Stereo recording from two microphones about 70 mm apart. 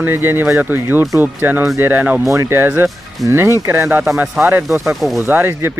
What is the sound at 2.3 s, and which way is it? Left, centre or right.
Speech, right.